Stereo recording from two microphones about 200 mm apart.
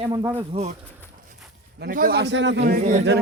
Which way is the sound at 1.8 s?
45° right (ahead or behind).